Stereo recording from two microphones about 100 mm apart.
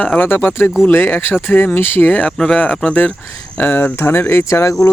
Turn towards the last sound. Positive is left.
turn(degrees=30)  # may be behind; listen again after turning